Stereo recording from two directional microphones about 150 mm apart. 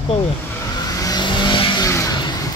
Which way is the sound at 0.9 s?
25° left (ahead or behind).